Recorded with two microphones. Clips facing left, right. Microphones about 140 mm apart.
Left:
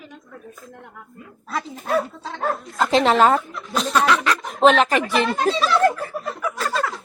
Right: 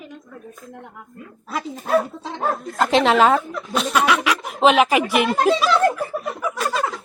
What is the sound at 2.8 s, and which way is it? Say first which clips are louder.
A woman's voice: even; centre (ahead or behind).